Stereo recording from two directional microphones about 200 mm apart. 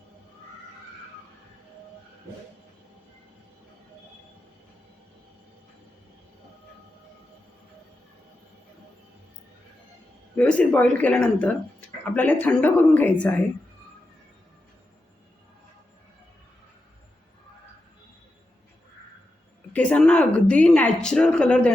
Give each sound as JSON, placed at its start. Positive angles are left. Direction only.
{"t": 10.3, "sound": "speech", "side_deg": 5}
{"t": 19.7, "sound": "speech", "side_deg": 5}